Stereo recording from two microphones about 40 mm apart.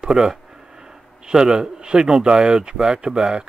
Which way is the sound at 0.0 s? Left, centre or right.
Centre.